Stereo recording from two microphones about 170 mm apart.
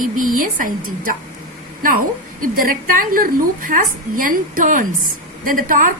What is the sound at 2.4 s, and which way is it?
A woman's voice, 55° right (ahead or behind).